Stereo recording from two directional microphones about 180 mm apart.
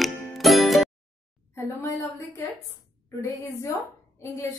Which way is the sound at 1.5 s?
15° left (ahead or behind).